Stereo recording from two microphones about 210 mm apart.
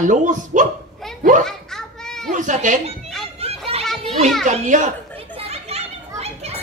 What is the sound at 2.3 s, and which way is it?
Speech, 35° right (ahead or behind).